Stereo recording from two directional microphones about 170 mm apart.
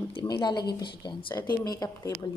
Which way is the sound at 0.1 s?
25° left (ahead or behind).